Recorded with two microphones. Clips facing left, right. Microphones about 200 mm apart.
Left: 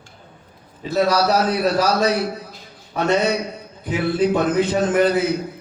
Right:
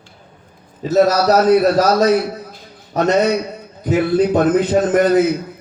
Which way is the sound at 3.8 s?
45° right (ahead or behind).